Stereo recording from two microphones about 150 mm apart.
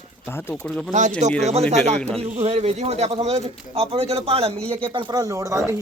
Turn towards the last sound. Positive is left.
turn(degrees=-20)  # may be behind; listen again after turning